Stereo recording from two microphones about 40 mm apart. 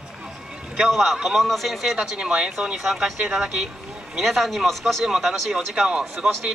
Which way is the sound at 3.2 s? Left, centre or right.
Right.